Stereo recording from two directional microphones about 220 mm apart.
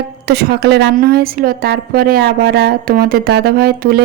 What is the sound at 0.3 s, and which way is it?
A woman's voice, 45° right (ahead or behind).